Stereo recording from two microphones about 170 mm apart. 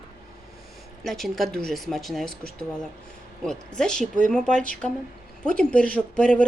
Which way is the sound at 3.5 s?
5° left (ahead or behind).